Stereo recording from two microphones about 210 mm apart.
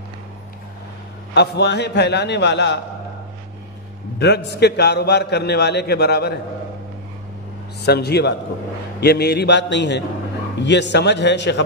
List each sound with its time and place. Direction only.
1.3 s a man's voice: 50° left (ahead or behind)
4.2 s a man's voice: 55° left (ahead or behind)
7.8 s a man's voice: 50° left (ahead or behind)